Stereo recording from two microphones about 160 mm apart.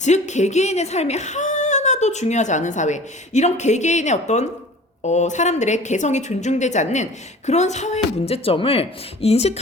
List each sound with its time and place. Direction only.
0.0 s a woman's voice: 45° left (ahead or behind)